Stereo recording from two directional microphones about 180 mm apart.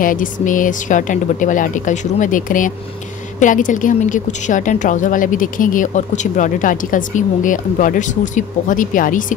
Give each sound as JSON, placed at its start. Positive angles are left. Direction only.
{"t": 0.0, "sound": "a woman's voice", "side_deg": 50}